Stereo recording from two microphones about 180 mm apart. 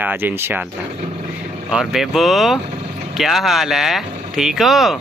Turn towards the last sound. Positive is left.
turn(degrees=0)  # may be behind; listen again after turning